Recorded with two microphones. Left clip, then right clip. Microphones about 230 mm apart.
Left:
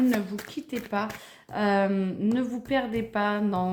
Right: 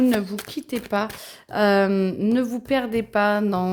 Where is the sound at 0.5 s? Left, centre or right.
Right.